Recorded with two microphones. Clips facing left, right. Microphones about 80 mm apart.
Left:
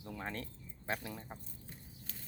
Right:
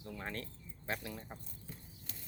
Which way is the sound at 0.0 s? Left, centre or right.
Centre.